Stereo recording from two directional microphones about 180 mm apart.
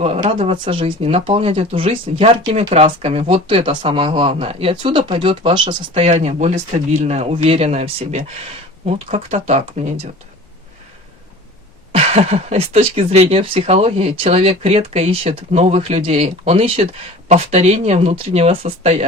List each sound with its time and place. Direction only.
0.0 s speech: 35° right (ahead or behind)
11.9 s speech: 35° right (ahead or behind)